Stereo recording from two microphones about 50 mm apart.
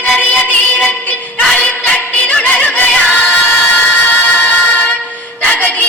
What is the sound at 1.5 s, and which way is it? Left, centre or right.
Music, left.